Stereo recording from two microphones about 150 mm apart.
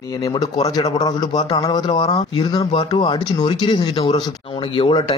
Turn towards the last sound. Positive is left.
turn(degrees=35)  # may be behind; listen again after turning